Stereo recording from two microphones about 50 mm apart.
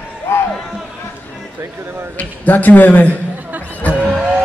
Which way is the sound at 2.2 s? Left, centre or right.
Left.